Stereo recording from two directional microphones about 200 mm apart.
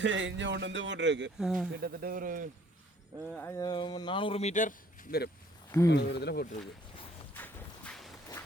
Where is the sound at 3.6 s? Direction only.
20° left (ahead or behind).